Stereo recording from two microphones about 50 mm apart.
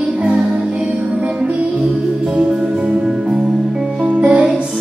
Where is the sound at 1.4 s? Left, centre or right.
Centre.